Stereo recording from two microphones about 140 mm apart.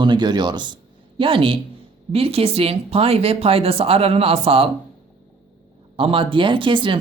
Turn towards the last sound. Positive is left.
turn(degrees=-35)  # may be behind; listen again after turning